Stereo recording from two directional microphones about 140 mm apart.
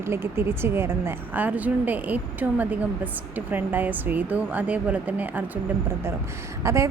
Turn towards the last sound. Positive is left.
turn(degrees=-20)  # may be behind; listen again after turning